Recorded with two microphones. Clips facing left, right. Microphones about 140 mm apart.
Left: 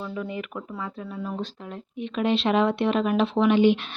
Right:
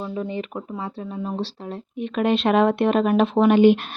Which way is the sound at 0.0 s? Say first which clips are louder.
Right 4 dB; 30° right (ahead or behind).